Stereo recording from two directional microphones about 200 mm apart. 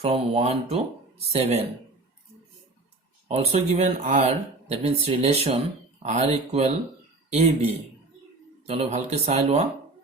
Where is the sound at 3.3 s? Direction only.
35° right (ahead or behind).